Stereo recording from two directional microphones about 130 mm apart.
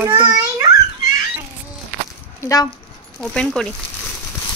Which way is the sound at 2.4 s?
25° left (ahead or behind).